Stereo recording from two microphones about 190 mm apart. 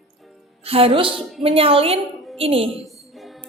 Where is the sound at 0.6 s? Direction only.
30° right (ahead or behind).